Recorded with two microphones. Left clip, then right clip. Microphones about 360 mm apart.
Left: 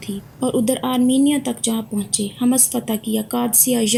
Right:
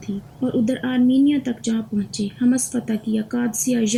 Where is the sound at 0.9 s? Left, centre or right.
Centre.